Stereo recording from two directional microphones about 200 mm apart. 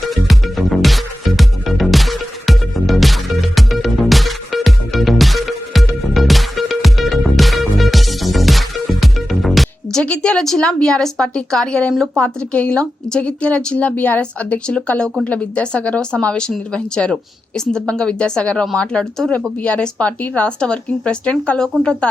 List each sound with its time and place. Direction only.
0.1 s music: centre (ahead or behind)
10.8 s speech: 5° left (ahead or behind)